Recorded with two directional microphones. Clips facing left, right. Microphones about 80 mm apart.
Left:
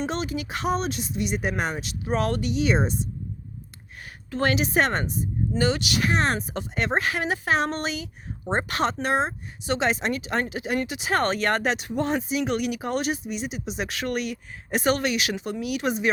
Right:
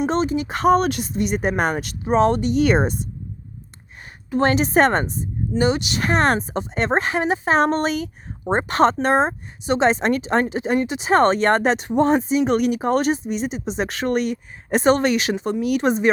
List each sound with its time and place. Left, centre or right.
0.1 s speech: right
1.1 s speech: right
2.0 s speech: right
2.5 s speech: right
4.3 s a woman's voice: right
4.5 s speech: right
5.5 s speech: right
6.0 s speech: right
6.5 s speech: right
7.6 s speech: right